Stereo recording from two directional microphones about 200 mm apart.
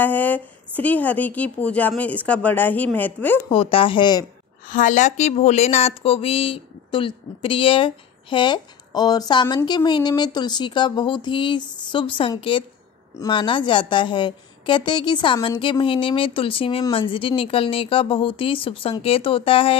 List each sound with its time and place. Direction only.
0.0 s speech: 10° left (ahead or behind)
3.4 s speech: 25° left (ahead or behind)
4.6 s speech: 40° left (ahead or behind)